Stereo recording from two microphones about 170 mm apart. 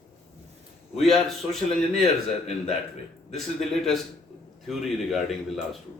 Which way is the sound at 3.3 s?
Centre (ahead or behind).